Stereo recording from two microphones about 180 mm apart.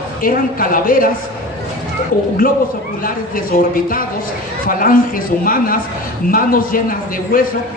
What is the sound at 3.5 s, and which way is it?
A woman's voice, 50° left (ahead or behind).